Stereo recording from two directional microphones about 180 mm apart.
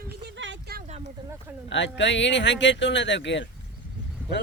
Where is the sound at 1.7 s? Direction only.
80° left.